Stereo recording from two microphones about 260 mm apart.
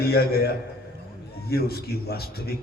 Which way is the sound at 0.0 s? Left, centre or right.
Left.